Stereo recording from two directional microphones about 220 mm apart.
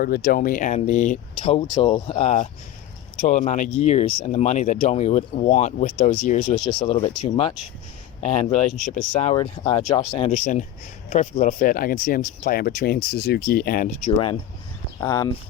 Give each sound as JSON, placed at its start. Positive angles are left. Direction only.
{"t": 0.0, "sound": "speech", "side_deg": 40}
{"t": 9.3, "sound": "speech", "side_deg": 20}
{"t": 10.3, "sound": "speech", "side_deg": 35}
{"t": 15.0, "sound": "speech", "side_deg": 15}